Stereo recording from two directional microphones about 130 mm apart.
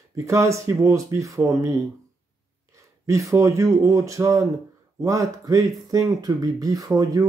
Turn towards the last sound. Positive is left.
turn(degrees=-25)  # may be behind; listen again after turning